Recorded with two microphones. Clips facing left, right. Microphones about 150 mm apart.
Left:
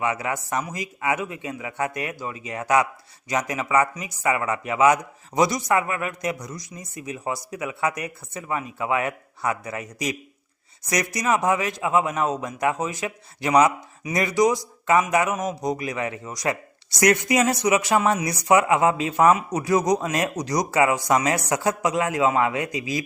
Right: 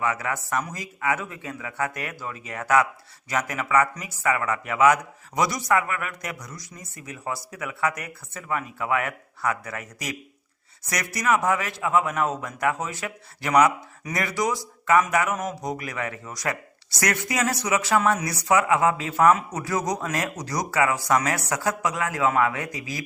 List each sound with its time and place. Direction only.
0.0 s a man's voice: 20° left (ahead or behind)